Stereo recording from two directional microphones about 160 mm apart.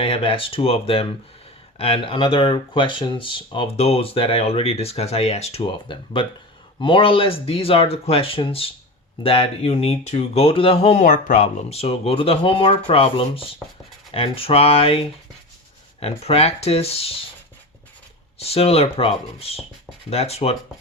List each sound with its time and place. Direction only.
0.0 s speech: 35° left (ahead or behind)
18.3 s speech: 40° left (ahead or behind)